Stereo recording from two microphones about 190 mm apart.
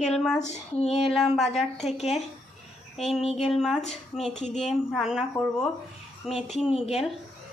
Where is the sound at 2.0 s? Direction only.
35° left (ahead or behind).